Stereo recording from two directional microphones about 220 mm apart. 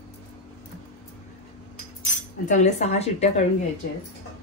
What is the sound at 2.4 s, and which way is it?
A woman's voice, 35° left (ahead or behind).